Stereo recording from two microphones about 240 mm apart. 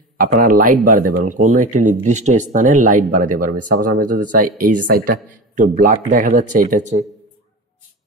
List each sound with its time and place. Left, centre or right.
0.2 s speech: right